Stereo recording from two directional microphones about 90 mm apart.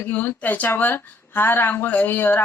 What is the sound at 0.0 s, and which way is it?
Speech, 20° left (ahead or behind).